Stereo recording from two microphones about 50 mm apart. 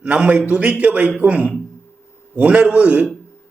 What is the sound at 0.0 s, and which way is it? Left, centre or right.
A man's voice, right.